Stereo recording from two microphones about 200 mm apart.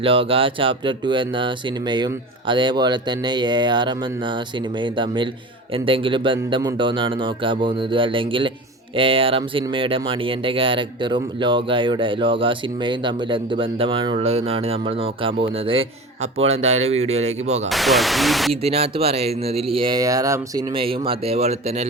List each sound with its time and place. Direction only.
0.0 s speech: 25° right (ahead or behind)
17.7 s speech: centre (ahead or behind)
18.6 s speech: 30° right (ahead or behind)
20.7 s speech: 25° right (ahead or behind)